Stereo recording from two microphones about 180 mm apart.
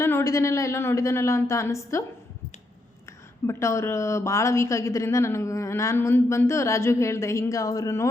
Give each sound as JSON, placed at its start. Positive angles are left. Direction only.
{"t": 0.0, "sound": "speech", "side_deg": 15}
{"t": 3.4, "sound": "speech", "side_deg": 15}